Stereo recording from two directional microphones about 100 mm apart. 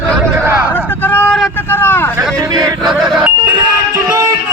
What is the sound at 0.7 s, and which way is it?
Vehicle, 20° left (ahead or behind).